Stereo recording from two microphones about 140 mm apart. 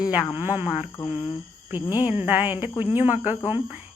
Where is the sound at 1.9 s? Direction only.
15° right (ahead or behind).